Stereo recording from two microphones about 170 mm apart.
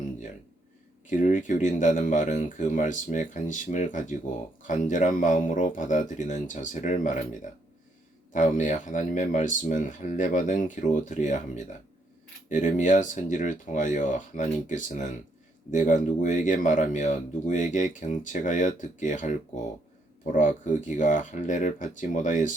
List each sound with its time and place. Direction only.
1.0 s speech: 50° left (ahead or behind)
8.3 s speech: 50° left (ahead or behind)